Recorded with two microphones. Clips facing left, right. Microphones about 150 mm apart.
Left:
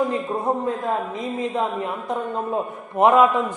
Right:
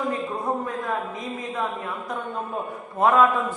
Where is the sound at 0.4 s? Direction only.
25° left (ahead or behind).